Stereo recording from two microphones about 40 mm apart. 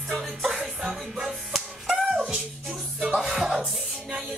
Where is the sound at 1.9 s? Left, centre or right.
Centre.